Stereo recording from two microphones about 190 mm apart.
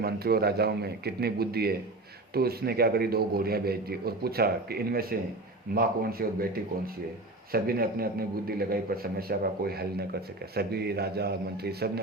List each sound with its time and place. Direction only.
0.0 s a man's voice: 55° right (ahead or behind)